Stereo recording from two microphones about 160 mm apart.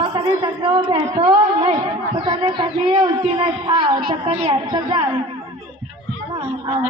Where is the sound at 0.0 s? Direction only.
25° right (ahead or behind).